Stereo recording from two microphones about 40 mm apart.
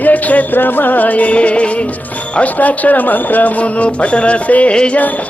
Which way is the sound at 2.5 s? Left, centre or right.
Left.